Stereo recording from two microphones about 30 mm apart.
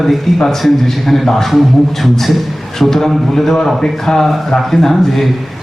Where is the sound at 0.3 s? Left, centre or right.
Centre.